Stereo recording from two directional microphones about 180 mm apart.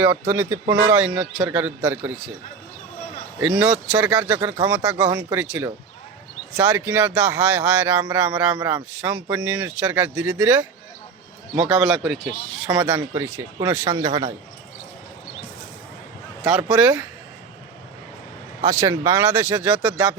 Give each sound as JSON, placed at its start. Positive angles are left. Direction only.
{"t": 0.0, "sound": "a man's voice", "side_deg": -10}
{"t": 3.4, "sound": "a man's voice", "side_deg": -5}
{"t": 11.7, "sound": "speech", "side_deg": 0}
{"t": 12.7, "sound": "a man's voice", "side_deg": -20}
{"t": 14.0, "sound": "a man's voice", "side_deg": -30}
{"t": 16.4, "sound": "a man's voice", "side_deg": -5}
{"t": 18.6, "sound": "a man's voice", "side_deg": -15}